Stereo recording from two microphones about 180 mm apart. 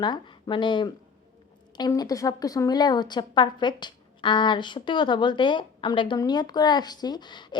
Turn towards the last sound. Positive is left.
turn(degrees=25)  # may be behind; listen again after turning